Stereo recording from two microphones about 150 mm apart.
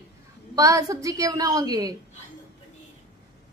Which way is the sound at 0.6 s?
25° right (ahead or behind).